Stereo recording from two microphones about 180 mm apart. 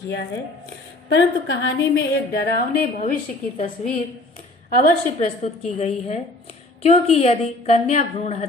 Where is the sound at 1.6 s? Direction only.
90° left.